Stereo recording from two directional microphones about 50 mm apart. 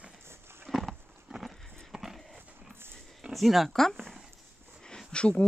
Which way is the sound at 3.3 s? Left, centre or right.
Centre.